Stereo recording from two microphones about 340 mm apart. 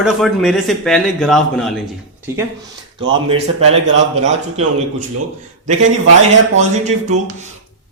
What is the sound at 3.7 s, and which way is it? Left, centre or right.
Speech, right.